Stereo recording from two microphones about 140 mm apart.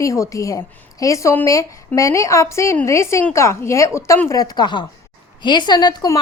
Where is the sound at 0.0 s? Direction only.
20° left (ahead or behind).